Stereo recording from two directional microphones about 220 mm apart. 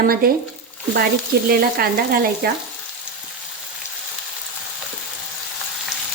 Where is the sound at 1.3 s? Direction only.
45° right (ahead or behind).